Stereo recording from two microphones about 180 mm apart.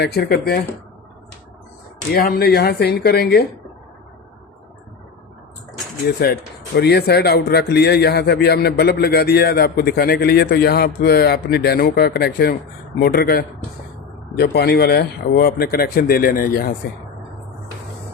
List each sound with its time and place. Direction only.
0.0 s a man's voice: 60° left (ahead or behind)
2.1 s a man's voice: 60° left (ahead or behind)
6.1 s a man's voice: 60° left (ahead or behind)